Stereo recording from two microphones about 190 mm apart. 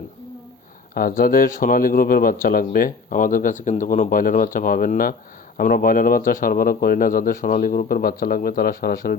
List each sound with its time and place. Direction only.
0.9 s speech: 50° left (ahead or behind)